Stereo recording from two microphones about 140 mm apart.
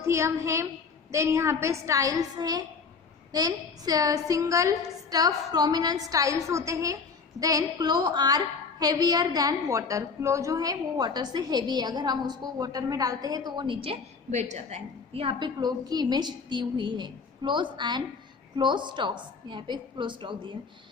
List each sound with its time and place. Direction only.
0.0 s a woman's voice: 20° right (ahead or behind); by 14.0 s 40° right (ahead or behind)
14.3 s a woman's voice: 55° right (ahead or behind); by 20.5 s 35° right (ahead or behind)